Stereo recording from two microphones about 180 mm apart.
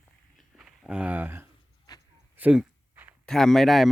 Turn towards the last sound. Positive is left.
turn(degrees=0)  # may be behind; listen again after turning